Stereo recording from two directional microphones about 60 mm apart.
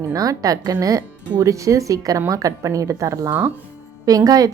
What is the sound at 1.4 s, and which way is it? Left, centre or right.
A woman's voice, right.